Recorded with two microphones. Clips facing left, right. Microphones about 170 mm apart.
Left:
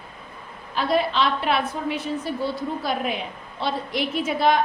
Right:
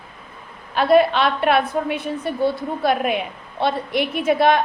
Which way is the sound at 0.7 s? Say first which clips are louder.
Right 7 dB; 60° right (ahead or behind).